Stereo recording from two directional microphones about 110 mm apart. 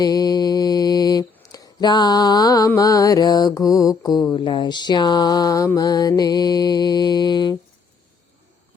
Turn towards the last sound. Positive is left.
turn(degrees=40)  # may be behind; listen again after turning